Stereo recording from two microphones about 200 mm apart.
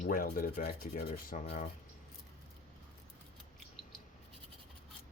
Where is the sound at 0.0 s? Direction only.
45° left (ahead or behind).